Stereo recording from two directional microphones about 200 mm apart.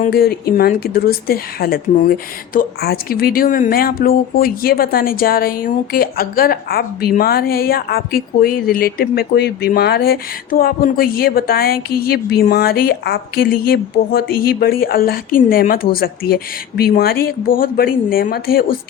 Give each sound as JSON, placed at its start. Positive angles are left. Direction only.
{"t": 0.0, "sound": "speech", "side_deg": 50}